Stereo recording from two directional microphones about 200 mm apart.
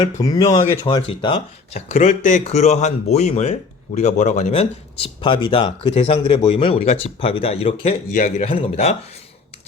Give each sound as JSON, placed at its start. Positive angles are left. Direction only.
{"t": 0.0, "sound": "speech", "side_deg": 20}